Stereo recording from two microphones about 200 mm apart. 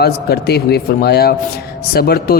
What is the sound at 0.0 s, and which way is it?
A man's voice, 50° left (ahead or behind).